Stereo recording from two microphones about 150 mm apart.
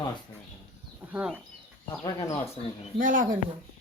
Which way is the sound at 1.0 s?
10° right (ahead or behind).